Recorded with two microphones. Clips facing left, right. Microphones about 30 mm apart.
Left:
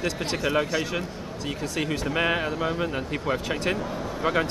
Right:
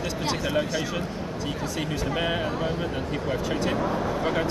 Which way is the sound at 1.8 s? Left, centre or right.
Left.